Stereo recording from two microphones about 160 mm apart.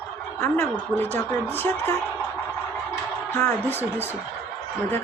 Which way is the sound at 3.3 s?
15° left (ahead or behind).